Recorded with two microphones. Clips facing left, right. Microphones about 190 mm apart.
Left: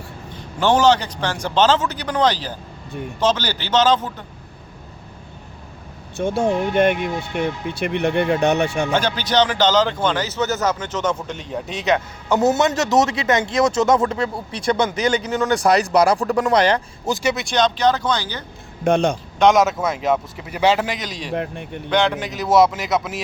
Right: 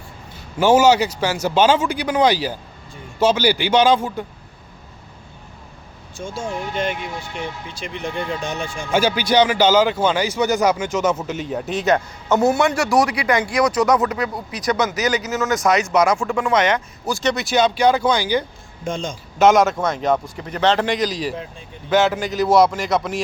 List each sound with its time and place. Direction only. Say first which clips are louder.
0.3 s a man's voice: right 3 dB; 10° right (ahead or behind)
6.1 s speech: left 8 dB; 65° left (ahead or behind)
8.9 s a man's voice: right 2 dB; 10° right (ahead or behind)
12.3 s speech: even; 20° left (ahead or behind)
17.2 s a man's voice: right 2 dB; centre (ahead or behind)
18.9 s a man's voice: left 9 dB; 70° left (ahead or behind)
19.4 s speech: right 1 dB; centre (ahead or behind)
21.3 s speech: left 7 dB; 65° left (ahead or behind)
21.8 s speech: right 2 dB; 5° right (ahead or behind)